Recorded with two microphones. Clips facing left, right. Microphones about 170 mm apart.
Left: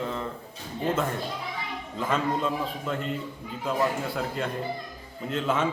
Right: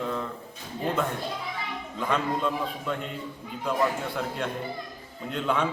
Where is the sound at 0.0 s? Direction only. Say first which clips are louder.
Right 1 dB; centre (ahead or behind).